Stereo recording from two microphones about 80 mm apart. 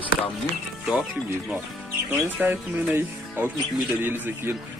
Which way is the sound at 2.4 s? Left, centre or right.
Right.